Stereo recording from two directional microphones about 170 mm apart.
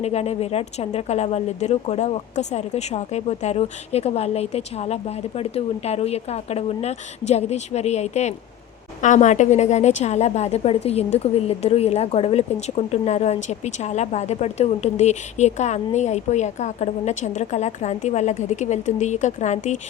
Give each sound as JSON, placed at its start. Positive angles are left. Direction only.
{"t": 0.0, "sound": "a woman's voice", "side_deg": 40}